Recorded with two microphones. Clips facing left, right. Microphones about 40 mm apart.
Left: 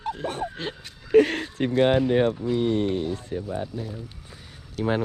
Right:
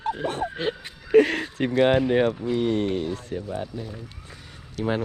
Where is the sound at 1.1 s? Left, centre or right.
Right.